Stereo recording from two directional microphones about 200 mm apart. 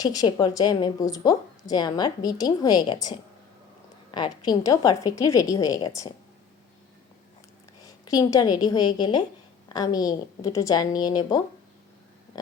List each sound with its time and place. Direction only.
0.0 s a woman's voice: 20° left (ahead or behind)
7.8 s a woman's voice: 20° left (ahead or behind)